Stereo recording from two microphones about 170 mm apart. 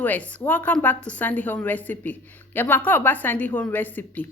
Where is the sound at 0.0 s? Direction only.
10° left (ahead or behind).